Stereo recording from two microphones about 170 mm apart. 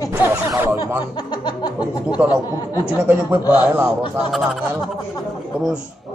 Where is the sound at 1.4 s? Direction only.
25° left (ahead or behind).